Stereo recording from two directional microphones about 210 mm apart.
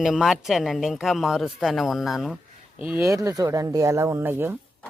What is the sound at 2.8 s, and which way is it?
Speech, 10° right (ahead or behind).